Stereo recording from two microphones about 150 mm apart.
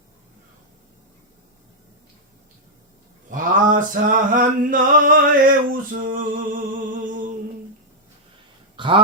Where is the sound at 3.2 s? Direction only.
60° right (ahead or behind).